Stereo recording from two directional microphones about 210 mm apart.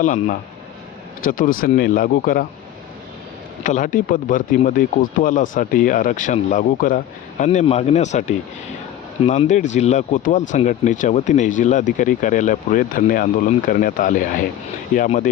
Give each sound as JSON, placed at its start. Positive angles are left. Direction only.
{"t": 0.0, "sound": "speech", "side_deg": 35}
{"t": 3.6, "sound": "speech", "side_deg": 40}